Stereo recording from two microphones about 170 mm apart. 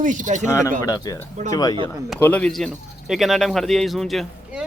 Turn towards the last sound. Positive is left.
turn(degrees=0)  # may be behind; listen again after turning